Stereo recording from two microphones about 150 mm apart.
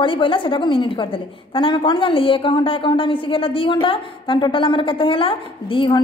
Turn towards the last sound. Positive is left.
turn(degrees=35)  # may be behind; listen again after turning